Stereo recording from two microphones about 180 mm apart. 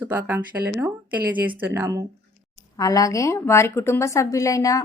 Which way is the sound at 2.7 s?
20° left (ahead or behind).